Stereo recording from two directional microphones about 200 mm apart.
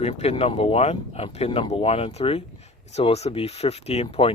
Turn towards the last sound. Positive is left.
turn(degrees=25)  # may be behind; listen again after turning